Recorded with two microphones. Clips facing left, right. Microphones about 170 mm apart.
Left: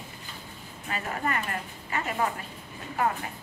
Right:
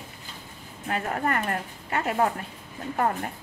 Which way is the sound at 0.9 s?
50° right (ahead or behind).